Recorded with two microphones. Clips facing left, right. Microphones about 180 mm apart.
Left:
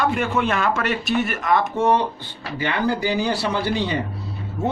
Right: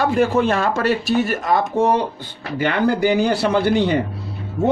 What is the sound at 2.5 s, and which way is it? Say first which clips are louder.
Speech: right 5 dB; 50° right (ahead or behind).